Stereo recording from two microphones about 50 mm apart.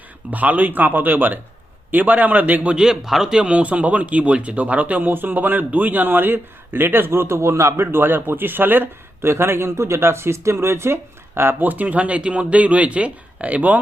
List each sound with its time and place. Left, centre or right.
0.3 s speech: right
2.7 s a man's voice: centre
3.5 s speech: right
7.9 s speech: right
9.2 s speech: right
11.6 s speech: right